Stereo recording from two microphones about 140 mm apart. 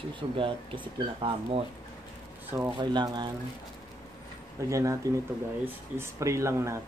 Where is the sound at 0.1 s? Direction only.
35° right (ahead or behind).